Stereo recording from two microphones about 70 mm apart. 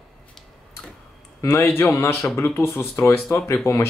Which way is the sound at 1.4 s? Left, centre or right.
Left.